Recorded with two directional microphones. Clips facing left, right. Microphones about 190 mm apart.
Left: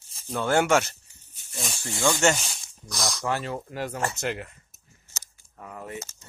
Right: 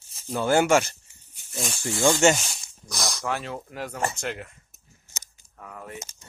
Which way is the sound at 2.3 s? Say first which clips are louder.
Right 2 dB; centre (ahead or behind).